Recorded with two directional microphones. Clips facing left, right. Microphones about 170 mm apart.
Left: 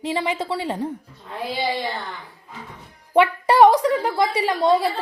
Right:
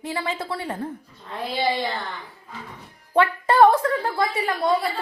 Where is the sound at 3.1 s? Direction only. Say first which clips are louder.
Left 2 dB; 15° left (ahead or behind).